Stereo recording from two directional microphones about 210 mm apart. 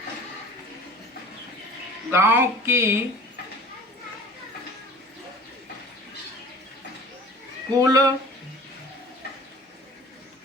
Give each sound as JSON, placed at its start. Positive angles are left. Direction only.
{"t": 2.0, "sound": "speech", "side_deg": -10}
{"t": 7.7, "sound": "speech", "side_deg": -15}